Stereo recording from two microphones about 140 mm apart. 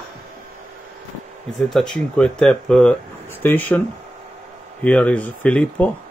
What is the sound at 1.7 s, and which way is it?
Speech, 5° left (ahead or behind).